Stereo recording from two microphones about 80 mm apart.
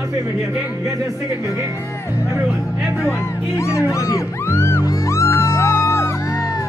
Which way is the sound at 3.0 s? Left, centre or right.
Left.